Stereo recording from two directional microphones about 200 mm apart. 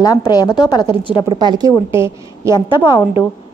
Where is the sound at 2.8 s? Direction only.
25° left (ahead or behind).